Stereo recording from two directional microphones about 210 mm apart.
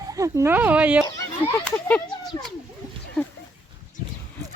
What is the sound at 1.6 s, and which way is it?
Speech, 5° left (ahead or behind).